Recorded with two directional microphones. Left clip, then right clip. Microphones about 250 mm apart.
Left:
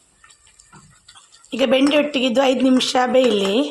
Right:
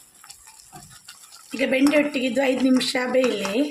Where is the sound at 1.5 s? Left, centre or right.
Centre.